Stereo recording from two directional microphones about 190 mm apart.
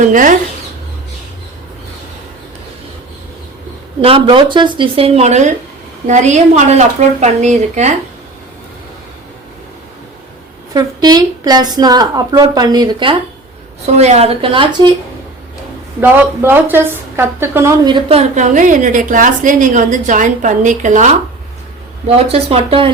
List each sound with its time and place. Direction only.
0.0 s speech: 45° right (ahead or behind)
4.0 s a woman's voice: 30° right (ahead or behind)
10.8 s a woman's voice: 20° right (ahead or behind)
13.8 s a woman's voice: 35° right (ahead or behind)
16.0 s a woman's voice: 10° right (ahead or behind)
18.2 s a woman's voice: 40° right (ahead or behind)
22.0 s a woman's voice: 30° right (ahead or behind)